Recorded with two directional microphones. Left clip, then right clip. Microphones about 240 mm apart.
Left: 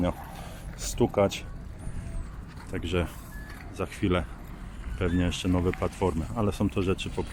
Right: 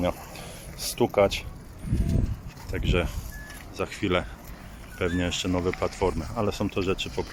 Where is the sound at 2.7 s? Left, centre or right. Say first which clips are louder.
Right 3 dB; centre.